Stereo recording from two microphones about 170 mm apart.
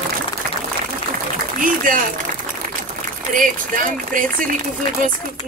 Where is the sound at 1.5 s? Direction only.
55° right (ahead or behind).